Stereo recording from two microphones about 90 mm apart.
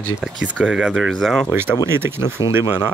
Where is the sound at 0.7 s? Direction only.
10° right (ahead or behind).